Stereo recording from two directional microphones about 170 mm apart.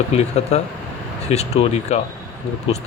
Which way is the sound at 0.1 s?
40° left (ahead or behind).